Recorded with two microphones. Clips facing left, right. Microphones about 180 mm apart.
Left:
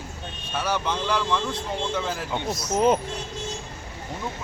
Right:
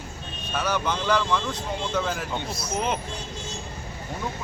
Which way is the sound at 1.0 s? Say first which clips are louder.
Right 3 dB; centre (ahead or behind).